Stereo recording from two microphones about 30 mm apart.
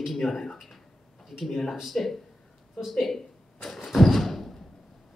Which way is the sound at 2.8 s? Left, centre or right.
Centre.